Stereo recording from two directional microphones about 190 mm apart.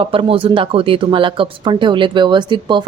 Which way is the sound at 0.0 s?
30° right (ahead or behind).